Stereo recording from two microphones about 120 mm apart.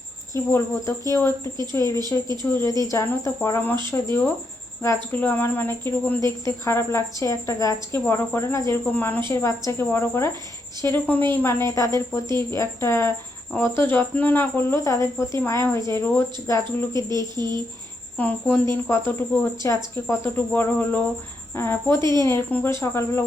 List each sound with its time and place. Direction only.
0.3 s a woman's voice: 20° left (ahead or behind)
16.6 s speech: 35° right (ahead or behind)
18.2 s a woman's voice: 10° left (ahead or behind)